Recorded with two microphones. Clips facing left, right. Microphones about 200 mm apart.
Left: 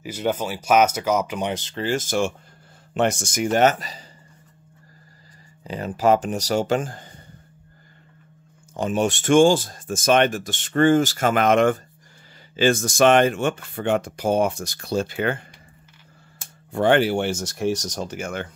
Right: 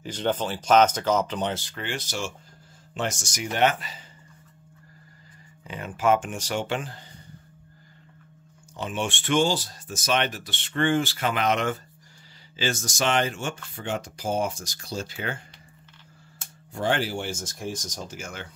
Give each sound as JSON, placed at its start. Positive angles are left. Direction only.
{"t": 0.0, "sound": "speech", "side_deg": 10}
{"t": 1.8, "sound": "speech", "side_deg": 45}
{"t": 5.6, "sound": "speech", "side_deg": 35}
{"t": 8.7, "sound": "speech", "side_deg": 40}
{"t": 16.7, "sound": "speech", "side_deg": 60}